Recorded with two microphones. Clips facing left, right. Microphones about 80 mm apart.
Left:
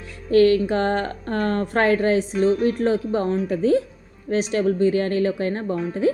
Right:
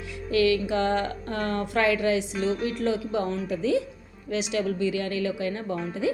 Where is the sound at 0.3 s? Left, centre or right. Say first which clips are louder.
Left 7 dB; left.